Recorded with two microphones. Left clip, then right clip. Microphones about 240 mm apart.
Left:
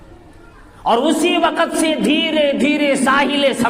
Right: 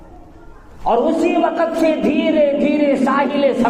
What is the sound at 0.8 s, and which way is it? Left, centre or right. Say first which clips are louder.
A man's voice: even; left.